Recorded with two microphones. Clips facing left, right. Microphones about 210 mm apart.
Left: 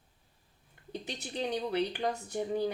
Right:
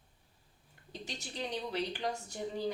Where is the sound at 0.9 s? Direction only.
55° left (ahead or behind).